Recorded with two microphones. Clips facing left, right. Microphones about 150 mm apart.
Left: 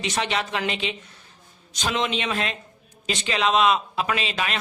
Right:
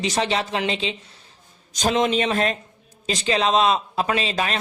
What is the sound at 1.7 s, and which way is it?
A man's voice, 40° right (ahead or behind).